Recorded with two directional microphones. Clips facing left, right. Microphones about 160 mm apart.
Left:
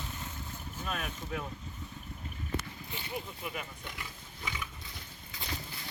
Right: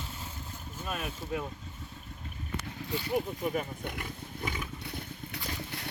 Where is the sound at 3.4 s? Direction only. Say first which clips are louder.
Right 9 dB; 40° right (ahead or behind).